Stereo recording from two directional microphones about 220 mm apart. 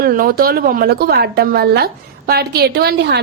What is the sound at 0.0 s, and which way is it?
A woman's voice, 40° right (ahead or behind).